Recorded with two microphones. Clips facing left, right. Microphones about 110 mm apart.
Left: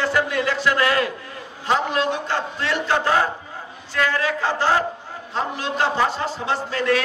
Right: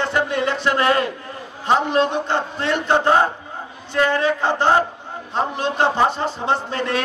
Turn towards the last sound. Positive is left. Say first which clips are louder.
# even
turn(degrees=-25)  # may be behind; listen again after turning